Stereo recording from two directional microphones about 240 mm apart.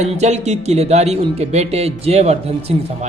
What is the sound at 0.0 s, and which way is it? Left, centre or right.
Speech, right.